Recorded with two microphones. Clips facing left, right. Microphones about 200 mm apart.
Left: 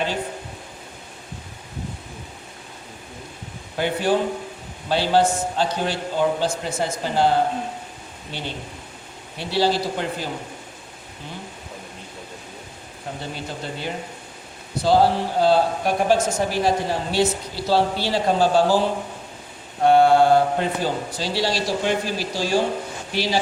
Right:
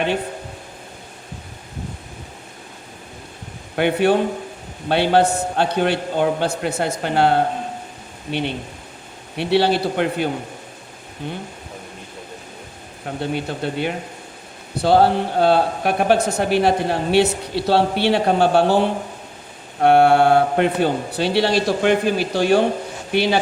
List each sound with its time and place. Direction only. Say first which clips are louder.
3.8 s speech: right 4 dB; 65° right (ahead or behind)
13.3 s speech: right 7 dB; 60° right (ahead or behind)